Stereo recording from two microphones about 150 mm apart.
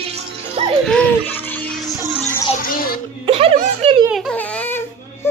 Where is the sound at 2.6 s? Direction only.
70° left (ahead or behind).